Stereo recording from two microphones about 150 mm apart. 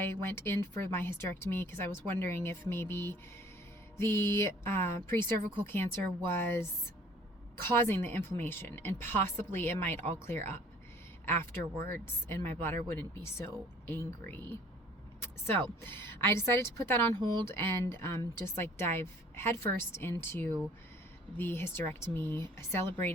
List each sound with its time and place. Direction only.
0.0 s speech: 15° left (ahead or behind)
7.8 s speech: 15° left (ahead or behind)